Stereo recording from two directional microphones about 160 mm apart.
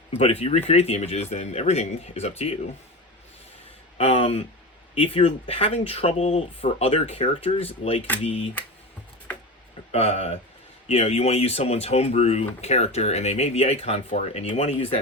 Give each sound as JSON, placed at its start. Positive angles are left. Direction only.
{"t": 0.1, "sound": "speech", "side_deg": 40}
{"t": 3.9, "sound": "speech", "side_deg": 35}
{"t": 9.9, "sound": "speech", "side_deg": 40}